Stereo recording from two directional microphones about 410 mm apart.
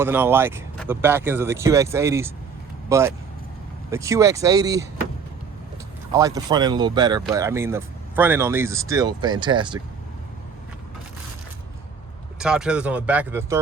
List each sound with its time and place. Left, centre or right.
0.0 s speech: centre
6.1 s speech: centre
12.4 s speech: centre